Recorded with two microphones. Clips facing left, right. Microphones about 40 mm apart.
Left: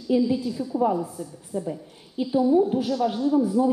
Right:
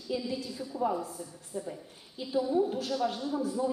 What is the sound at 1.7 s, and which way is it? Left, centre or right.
A woman's voice, left.